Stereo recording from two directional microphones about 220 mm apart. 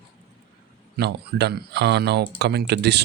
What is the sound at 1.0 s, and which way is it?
Speech, 50° right (ahead or behind).